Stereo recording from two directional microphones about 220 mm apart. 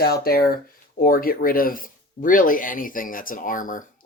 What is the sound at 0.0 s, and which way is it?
Speech, 45° left (ahead or behind).